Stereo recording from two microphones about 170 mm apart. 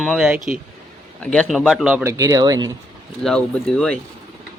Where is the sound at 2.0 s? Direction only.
20° right (ahead or behind).